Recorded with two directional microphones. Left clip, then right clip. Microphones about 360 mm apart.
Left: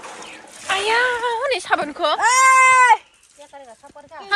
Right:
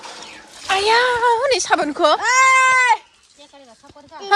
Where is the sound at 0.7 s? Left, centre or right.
Centre.